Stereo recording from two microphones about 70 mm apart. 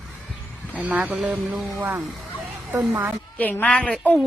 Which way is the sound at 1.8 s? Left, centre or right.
Right.